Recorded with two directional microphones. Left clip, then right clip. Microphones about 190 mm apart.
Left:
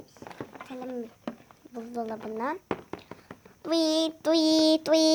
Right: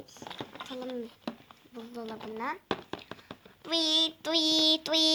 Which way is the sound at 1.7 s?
60° left (ahead or behind).